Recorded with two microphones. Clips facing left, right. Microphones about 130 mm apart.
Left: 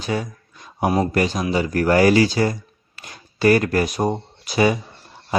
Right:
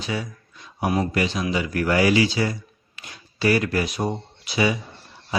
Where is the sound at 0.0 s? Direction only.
45° left (ahead or behind).